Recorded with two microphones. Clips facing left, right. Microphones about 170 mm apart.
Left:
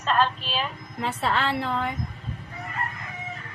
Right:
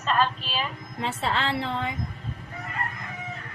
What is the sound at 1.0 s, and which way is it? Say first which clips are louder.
Speech: left 2 dB; 25° right (ahead or behind).